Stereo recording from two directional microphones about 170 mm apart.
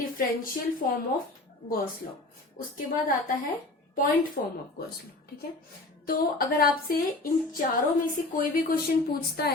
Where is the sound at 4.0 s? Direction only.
55° left (ahead or behind).